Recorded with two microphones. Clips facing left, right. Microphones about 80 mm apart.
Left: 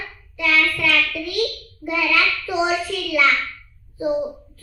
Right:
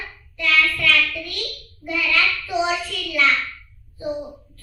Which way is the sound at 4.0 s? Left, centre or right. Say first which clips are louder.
Left 6 dB; left.